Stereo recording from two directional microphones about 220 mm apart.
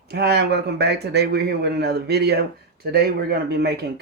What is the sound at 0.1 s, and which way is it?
A man's voice, 50° right (ahead or behind).